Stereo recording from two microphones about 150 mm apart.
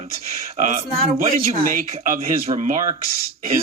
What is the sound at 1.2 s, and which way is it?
Speech, 60° right (ahead or behind).